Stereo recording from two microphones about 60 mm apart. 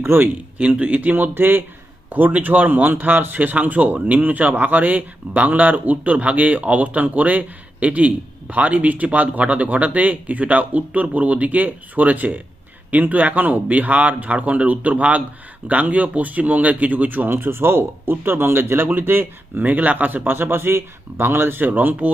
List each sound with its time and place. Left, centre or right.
0.0 s speech: right
0.6 s a man's voice: right
1.1 s a man's voice: right